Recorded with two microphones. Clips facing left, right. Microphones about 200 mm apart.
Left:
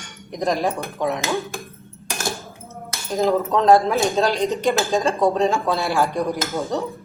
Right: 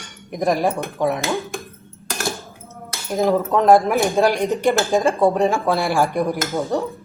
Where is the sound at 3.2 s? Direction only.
15° right (ahead or behind).